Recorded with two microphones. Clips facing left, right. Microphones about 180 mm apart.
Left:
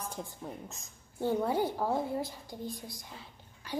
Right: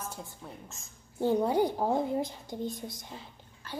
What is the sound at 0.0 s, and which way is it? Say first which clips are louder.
Speech: left 2 dB; 15° left (ahead or behind).